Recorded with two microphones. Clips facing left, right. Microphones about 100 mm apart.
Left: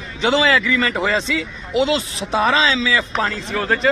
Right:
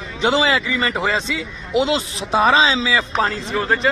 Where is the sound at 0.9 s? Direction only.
15° right (ahead or behind).